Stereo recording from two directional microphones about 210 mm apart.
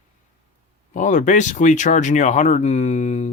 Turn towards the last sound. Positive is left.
turn(degrees=35)  # may be behind; listen again after turning